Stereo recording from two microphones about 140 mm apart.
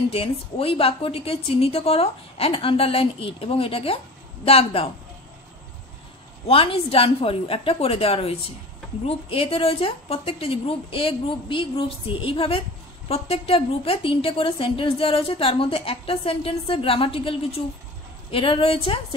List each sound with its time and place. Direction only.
0.1 s a woman's voice: 40° left (ahead or behind)
6.4 s a woman's voice: 40° left (ahead or behind)